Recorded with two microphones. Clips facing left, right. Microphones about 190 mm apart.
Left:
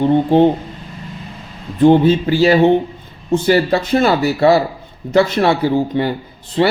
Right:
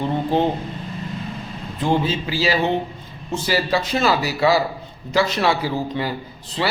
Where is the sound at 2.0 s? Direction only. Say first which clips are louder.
Left 10 dB; 55° left (ahead or behind).